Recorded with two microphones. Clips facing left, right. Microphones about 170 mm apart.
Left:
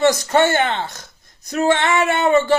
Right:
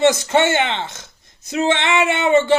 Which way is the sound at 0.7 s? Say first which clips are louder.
Left 1 dB; 20° right (ahead or behind).